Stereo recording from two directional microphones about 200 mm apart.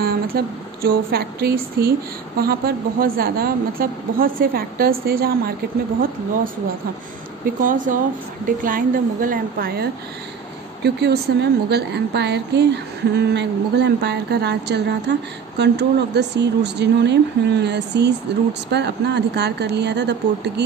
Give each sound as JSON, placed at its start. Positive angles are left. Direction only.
{"t": 0.0, "sound": "a sound", "side_deg": -50}
{"t": 0.8, "sound": "a woman's voice", "side_deg": -50}
{"t": 7.6, "sound": "a woman's voice", "side_deg": -40}